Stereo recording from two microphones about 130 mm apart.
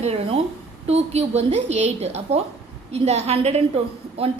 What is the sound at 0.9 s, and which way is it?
A woman's voice, 55° right (ahead or behind).